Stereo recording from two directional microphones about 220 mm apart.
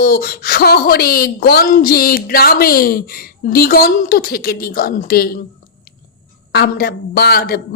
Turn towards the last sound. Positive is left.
turn(degrees=45)  # may be behind; listen again after turning